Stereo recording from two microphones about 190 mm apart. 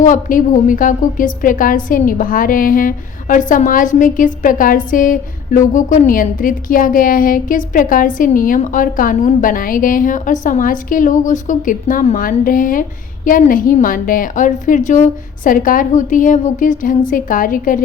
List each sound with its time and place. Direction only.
0.0 s a woman's voice: 45° left (ahead or behind)